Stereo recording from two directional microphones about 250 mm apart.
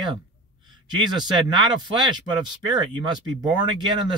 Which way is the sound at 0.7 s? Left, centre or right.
Centre.